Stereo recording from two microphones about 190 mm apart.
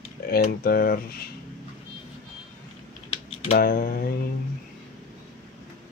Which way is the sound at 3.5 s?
50° left (ahead or behind).